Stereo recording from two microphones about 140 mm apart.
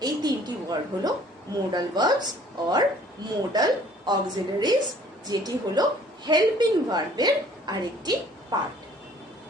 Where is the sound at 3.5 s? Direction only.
30° right (ahead or behind).